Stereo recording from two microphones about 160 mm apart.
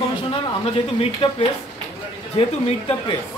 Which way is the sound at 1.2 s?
35° left (ahead or behind).